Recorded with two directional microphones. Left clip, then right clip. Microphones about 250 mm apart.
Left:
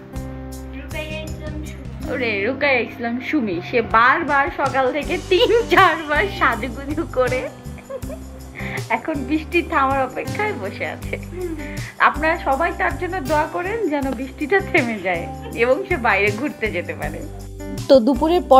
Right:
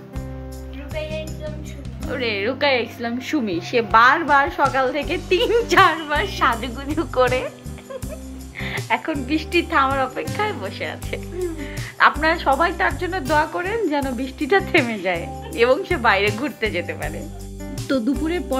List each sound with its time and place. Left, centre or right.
2.0 s speech: centre
8.5 s speech: centre
17.8 s speech: left